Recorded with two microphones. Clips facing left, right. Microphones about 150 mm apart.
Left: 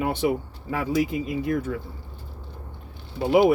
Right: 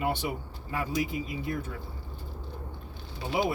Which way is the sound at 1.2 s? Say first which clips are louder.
Left 8 dB; 60° left (ahead or behind).